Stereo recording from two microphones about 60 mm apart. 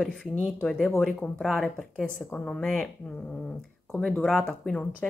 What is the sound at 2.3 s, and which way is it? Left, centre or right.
Speech, centre.